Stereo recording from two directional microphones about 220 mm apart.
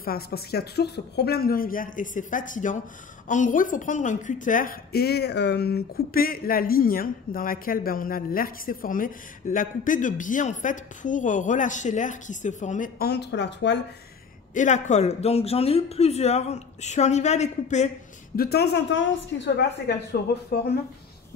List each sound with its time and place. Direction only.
0.0 s a woman's voice: 45° left (ahead or behind)
14.5 s speech: 35° left (ahead or behind)
18.3 s a woman's voice: 45° left (ahead or behind)